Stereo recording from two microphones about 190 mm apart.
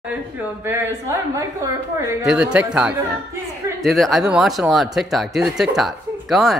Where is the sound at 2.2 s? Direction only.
5° right (ahead or behind).